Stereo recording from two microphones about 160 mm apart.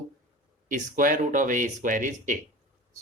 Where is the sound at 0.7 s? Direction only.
55° right (ahead or behind).